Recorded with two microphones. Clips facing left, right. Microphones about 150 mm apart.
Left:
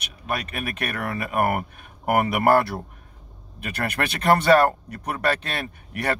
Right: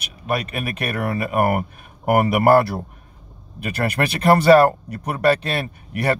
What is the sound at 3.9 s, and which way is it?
Speech, 30° right (ahead or behind).